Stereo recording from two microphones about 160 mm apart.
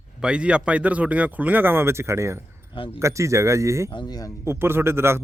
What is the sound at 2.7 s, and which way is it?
Speech, 35° left (ahead or behind).